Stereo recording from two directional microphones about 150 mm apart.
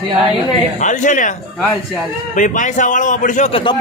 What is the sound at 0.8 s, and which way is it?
A man's voice, 55° left (ahead or behind).